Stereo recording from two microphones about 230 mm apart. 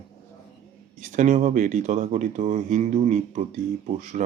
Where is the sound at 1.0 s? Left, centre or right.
Right.